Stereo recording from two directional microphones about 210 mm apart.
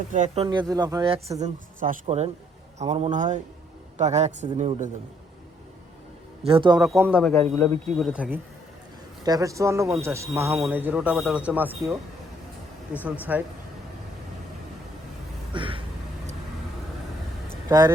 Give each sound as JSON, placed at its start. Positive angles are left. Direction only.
{"t": 0.1, "sound": "speech", "side_deg": -35}
{"t": 0.4, "sound": "speech", "side_deg": -20}
{"t": 6.4, "sound": "speech", "side_deg": -25}
{"t": 6.7, "sound": "speech", "side_deg": -5}
{"t": 13.1, "sound": "speech", "side_deg": -10}
{"t": 15.5, "sound": "vehicle", "side_deg": -25}
{"t": 17.7, "sound": "speech", "side_deg": -20}